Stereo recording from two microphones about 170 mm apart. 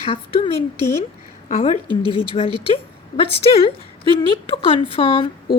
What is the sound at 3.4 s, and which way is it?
A woman's voice, 35° left (ahead or behind).